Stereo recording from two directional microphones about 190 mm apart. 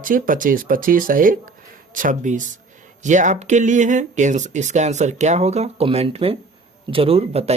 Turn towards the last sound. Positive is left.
turn(degrees=-35)  # may be behind; listen again after turning